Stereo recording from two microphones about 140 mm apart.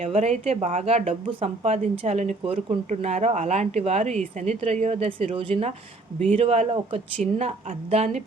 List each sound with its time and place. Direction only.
0.0 s speech: 50° right (ahead or behind)